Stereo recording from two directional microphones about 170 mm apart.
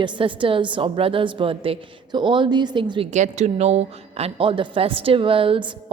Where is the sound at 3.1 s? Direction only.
40° right (ahead or behind).